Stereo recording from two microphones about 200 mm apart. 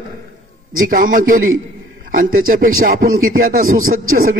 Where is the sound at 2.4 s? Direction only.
45° right (ahead or behind).